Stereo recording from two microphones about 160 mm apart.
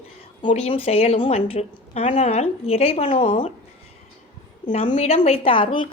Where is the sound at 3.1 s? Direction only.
30° left (ahead or behind).